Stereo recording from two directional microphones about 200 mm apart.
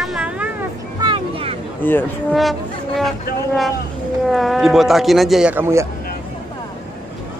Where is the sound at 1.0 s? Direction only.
25° right (ahead or behind).